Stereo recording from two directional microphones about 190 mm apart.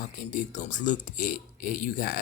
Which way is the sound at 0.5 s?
40° left (ahead or behind).